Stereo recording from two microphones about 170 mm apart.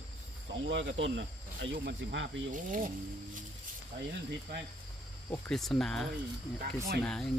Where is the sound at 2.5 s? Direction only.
50° right (ahead or behind).